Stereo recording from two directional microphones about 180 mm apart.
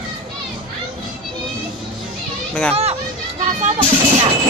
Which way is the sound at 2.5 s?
5° left (ahead or behind).